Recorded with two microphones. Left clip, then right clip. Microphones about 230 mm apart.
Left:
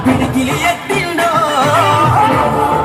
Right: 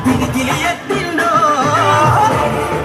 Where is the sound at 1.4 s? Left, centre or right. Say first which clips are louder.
Left 1 dB; left.